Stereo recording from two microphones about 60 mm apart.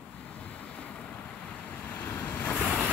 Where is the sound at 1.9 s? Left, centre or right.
Left.